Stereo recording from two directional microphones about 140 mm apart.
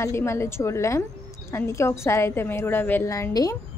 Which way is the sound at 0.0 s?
20° left (ahead or behind).